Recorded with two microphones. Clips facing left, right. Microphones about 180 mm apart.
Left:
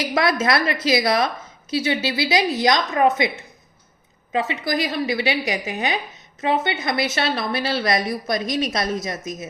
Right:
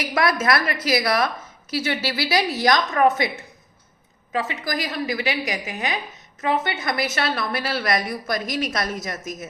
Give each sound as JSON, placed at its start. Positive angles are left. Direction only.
{"t": 0.0, "sound": "a woman's voice", "side_deg": 25}
{"t": 4.3, "sound": "a woman's voice", "side_deg": 25}